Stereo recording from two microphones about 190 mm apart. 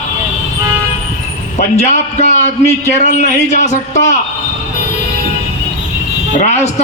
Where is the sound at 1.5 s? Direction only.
35° left (ahead or behind).